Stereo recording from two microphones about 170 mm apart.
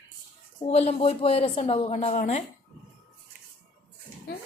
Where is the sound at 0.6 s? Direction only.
35° left (ahead or behind).